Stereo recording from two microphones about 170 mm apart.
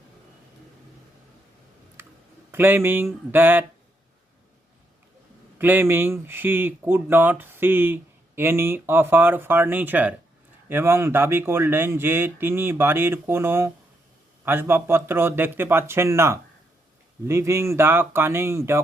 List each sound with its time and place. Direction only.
2.0 s a sound: 15° right (ahead or behind)
2.5 s speech: 15° right (ahead or behind)
5.5 s speech: 10° right (ahead or behind)